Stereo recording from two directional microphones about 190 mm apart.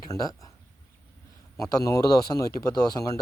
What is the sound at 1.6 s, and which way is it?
Speech, 15° left (ahead or behind).